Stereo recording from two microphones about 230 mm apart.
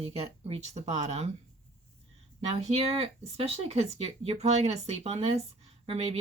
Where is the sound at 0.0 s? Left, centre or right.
Right.